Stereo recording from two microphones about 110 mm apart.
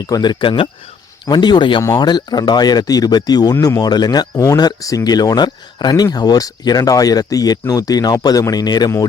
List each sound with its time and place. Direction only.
0.0 s speech: 40° left (ahead or behind)